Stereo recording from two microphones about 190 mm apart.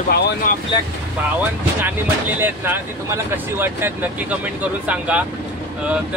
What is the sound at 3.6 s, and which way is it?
Speech, 10° right (ahead or behind).